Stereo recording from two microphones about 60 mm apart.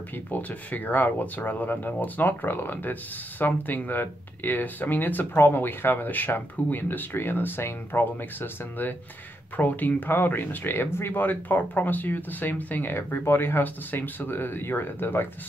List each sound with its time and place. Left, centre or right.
0.3 s speech: left